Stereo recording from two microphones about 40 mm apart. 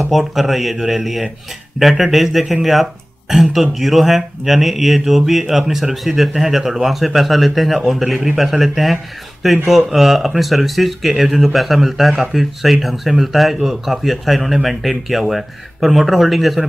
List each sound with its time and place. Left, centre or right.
0.1 s a man's voice: centre